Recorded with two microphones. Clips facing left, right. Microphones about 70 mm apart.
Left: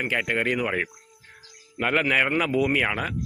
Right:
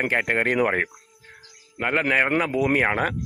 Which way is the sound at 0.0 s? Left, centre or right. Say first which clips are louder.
Right 3 dB; right.